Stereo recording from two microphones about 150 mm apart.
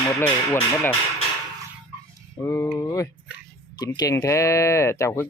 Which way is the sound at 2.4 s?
20° left (ahead or behind).